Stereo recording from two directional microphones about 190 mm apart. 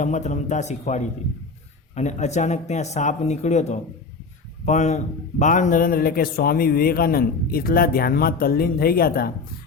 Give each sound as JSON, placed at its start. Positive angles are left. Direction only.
{"t": 0.0, "sound": "a man's voice", "side_deg": 40}